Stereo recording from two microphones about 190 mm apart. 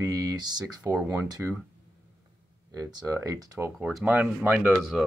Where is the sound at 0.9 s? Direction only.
10° right (ahead or behind).